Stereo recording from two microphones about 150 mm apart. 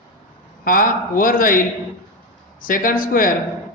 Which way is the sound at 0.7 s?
65° left (ahead or behind).